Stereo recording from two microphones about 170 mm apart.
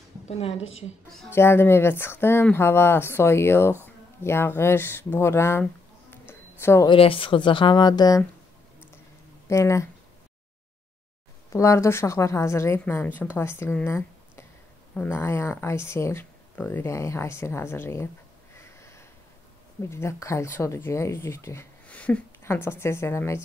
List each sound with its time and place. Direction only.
0.3 s a woman's voice: 40° left (ahead or behind)
1.3 s speech: 15° left (ahead or behind)
6.9 s speech: 30° left (ahead or behind)
9.5 s speech: 15° left (ahead or behind)
11.5 s speech: 15° left (ahead or behind)
18.6 s sniff: 15° left (ahead or behind)
19.8 s speech: 15° left (ahead or behind)